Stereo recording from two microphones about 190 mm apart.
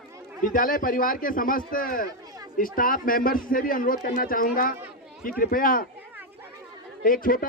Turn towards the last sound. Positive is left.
turn(degrees=50)  # may be behind; listen again after turning